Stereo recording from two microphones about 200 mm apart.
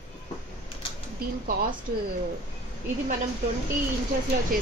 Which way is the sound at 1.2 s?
50° right (ahead or behind).